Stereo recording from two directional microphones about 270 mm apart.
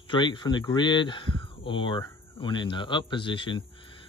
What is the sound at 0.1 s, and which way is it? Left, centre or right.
Speech, centre.